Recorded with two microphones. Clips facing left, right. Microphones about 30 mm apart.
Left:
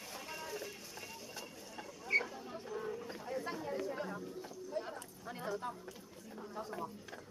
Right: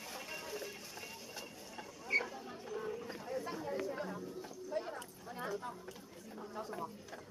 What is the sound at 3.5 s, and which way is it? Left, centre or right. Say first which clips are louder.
Chatter: even; centre.